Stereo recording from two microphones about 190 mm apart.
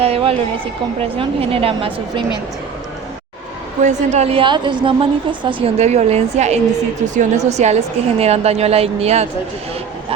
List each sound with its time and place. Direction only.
0.0 s a woman's voice: 30° right (ahead or behind)
3.8 s a woman's voice: 40° right (ahead or behind)